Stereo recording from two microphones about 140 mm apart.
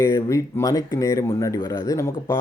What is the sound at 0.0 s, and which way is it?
Speech, 25° left (ahead or behind).